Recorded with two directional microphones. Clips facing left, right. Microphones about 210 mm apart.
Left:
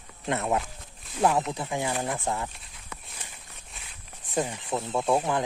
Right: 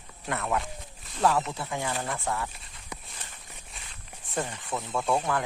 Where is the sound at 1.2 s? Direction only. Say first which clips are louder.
Left 1 dB; 20° left (ahead or behind).